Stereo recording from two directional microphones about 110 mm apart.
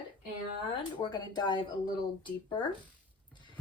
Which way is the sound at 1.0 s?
40° left (ahead or behind).